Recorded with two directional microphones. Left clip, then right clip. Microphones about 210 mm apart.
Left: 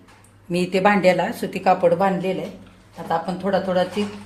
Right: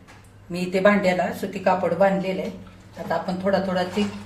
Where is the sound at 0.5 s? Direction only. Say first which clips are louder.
Left 1 dB; 45° left (ahead or behind).